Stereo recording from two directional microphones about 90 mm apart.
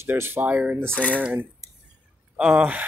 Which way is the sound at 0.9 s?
10° left (ahead or behind).